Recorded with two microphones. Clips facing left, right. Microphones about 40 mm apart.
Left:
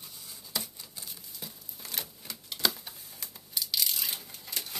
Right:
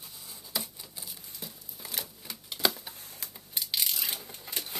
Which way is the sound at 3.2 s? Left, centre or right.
Right.